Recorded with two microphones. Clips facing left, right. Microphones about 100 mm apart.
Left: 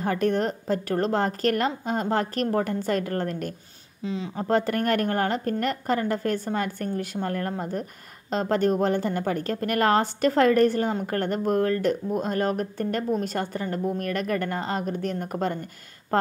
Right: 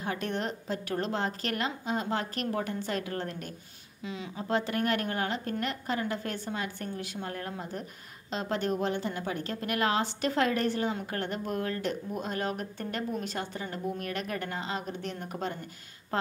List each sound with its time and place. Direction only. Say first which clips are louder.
0.0 s a woman's voice: left 9 dB; 50° left (ahead or behind)
4.0 s speech: left 8 dB; 30° left (ahead or behind)
4.4 s a woman's voice: left 6 dB; 50° left (ahead or behind)